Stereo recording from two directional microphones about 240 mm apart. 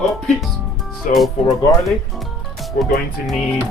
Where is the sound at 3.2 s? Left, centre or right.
Centre.